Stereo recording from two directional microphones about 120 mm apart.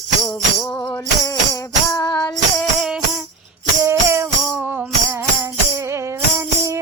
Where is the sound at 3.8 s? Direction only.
25° right (ahead or behind).